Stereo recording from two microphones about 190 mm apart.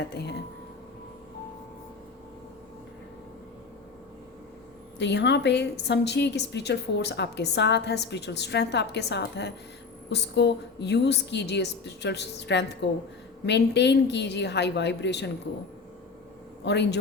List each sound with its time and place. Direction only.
0.1 s a woman's voice: 60° left (ahead or behind)
4.9 s a woman's voice: 65° left (ahead or behind)
16.6 s a woman's voice: 65° left (ahead or behind)